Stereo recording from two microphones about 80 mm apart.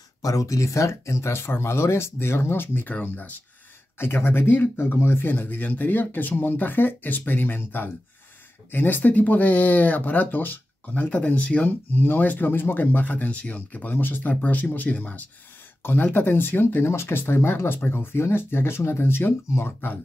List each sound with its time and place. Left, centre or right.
0.2 s speech: left